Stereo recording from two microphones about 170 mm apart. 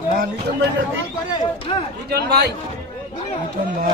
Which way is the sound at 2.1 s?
70° right (ahead or behind).